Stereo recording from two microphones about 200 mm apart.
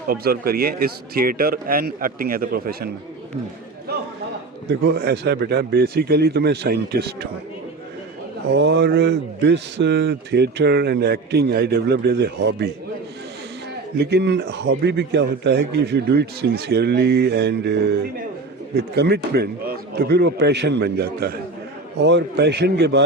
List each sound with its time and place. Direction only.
0.1 s speech: 50° right (ahead or behind)
3.9 s a sound: 50° right (ahead or behind)
4.7 s speech: 50° right (ahead or behind)
8.4 s speech: 60° right (ahead or behind)
14.0 s speech: 55° right (ahead or behind)